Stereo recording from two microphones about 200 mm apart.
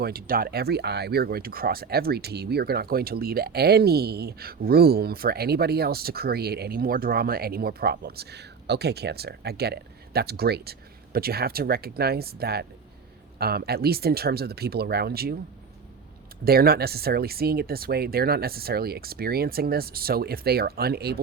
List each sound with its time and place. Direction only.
0.0 s speech: 50° right (ahead or behind)
16.4 s speech: 50° right (ahead or behind)